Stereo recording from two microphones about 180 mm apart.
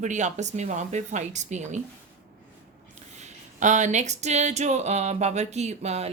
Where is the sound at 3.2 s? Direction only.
40° right (ahead or behind).